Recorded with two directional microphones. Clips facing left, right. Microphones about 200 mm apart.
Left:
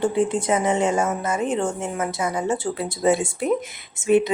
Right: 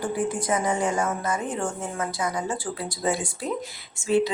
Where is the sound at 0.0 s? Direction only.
25° left (ahead or behind).